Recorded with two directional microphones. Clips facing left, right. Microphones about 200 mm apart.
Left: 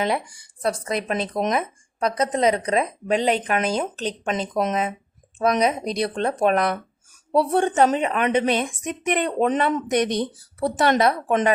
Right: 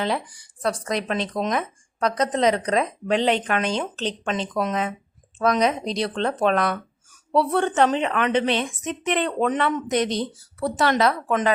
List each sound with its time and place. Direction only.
0.0 s a woman's voice: 10° left (ahead or behind)
4.5 s a woman's voice: 20° left (ahead or behind)